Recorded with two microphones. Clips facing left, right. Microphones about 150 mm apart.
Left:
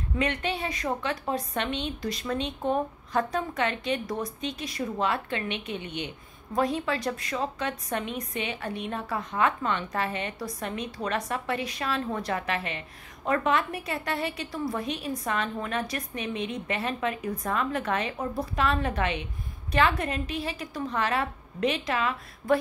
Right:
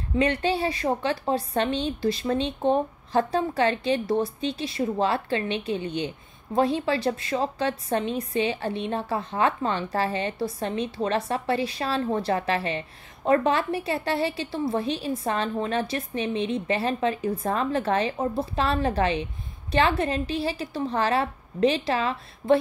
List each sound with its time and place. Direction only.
0.1 s a woman's voice: 30° right (ahead or behind)